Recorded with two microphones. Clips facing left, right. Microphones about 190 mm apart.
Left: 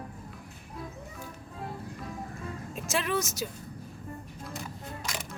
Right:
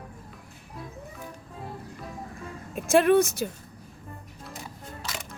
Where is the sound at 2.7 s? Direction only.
55° right (ahead or behind).